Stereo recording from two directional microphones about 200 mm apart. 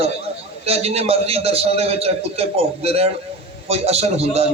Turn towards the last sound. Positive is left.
turn(degrees=-30)  # may be behind; listen again after turning